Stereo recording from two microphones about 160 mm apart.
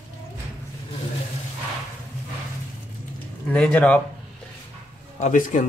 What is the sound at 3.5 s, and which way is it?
Speech, 10° left (ahead or behind).